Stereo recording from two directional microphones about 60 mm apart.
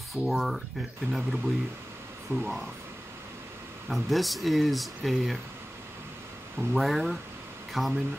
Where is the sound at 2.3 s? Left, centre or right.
Right.